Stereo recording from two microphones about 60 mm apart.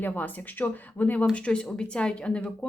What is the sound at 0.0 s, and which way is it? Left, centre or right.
Speech, left.